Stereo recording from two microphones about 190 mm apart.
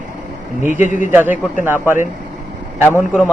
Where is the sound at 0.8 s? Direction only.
45° left (ahead or behind).